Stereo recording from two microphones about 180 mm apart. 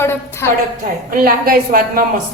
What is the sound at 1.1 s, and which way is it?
Speech, 55° right (ahead or behind).